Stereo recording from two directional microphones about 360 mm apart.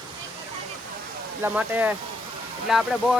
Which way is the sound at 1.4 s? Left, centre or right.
Centre.